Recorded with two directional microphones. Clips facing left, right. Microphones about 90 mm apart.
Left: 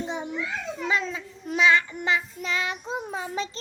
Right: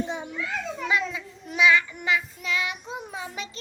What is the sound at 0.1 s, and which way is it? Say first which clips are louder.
Children playing: left 1 dB; 20° left (ahead or behind).